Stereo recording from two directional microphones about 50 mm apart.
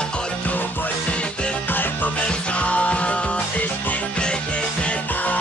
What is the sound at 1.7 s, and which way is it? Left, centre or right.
Music, left.